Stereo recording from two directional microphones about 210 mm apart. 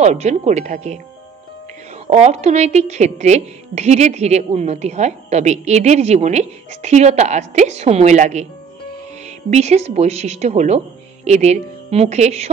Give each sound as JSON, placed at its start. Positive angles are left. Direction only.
{"t": 0.0, "sound": "a woman's voice", "side_deg": -30}
{"t": 2.0, "sound": "a woman's voice", "side_deg": -30}
{"t": 9.5, "sound": "a woman's voice", "side_deg": -30}